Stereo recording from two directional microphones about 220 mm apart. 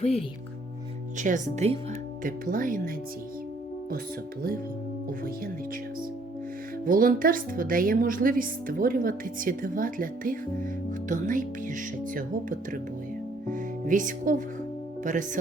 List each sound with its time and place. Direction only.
0.0 s speech: 30° left (ahead or behind)
1.2 s a woman's voice: 35° right (ahead or behind)
6.8 s a woman's voice: 40° right (ahead or behind)